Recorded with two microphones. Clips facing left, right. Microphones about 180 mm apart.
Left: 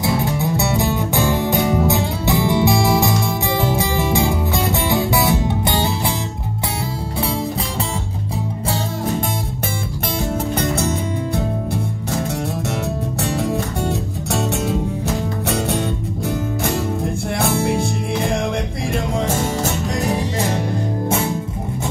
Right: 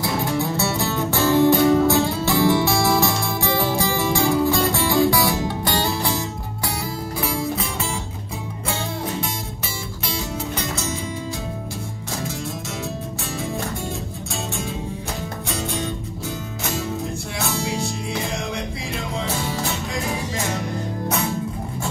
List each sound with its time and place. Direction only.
0.0 s music: 20° left (ahead or behind)
10.6 s music: 60° left (ahead or behind)
13.2 s music: 70° left (ahead or behind)
16.6 s music: 55° left (ahead or behind)